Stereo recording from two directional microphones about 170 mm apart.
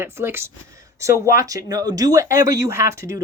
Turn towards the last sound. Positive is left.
turn(degrees=-15)  # may be behind; listen again after turning